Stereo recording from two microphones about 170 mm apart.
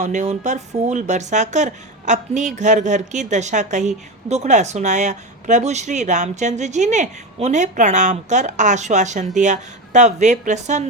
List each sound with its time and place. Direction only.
0.0 s a woman's voice: 45° right (ahead or behind)